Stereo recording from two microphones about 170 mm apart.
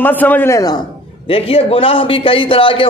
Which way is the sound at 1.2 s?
35° left (ahead or behind).